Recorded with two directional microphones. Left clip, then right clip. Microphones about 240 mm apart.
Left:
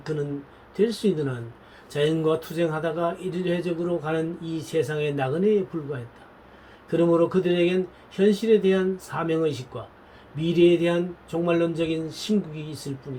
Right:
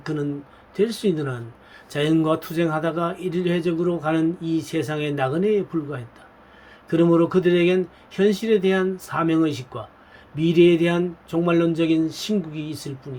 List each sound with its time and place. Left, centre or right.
0.0 s speech: right